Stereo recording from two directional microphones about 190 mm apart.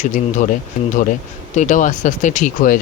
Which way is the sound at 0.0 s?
40° left (ahead or behind).